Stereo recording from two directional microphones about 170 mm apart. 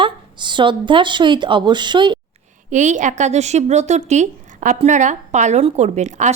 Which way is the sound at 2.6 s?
45° right (ahead or behind).